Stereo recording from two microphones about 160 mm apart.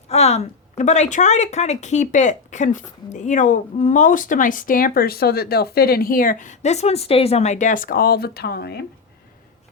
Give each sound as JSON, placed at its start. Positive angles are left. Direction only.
{"t": 0.1, "sound": "a woman's voice", "side_deg": 40}